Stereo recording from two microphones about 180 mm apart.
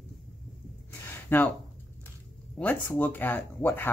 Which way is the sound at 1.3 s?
10° left (ahead or behind).